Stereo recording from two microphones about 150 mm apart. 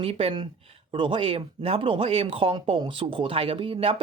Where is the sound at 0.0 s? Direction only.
40° right (ahead or behind).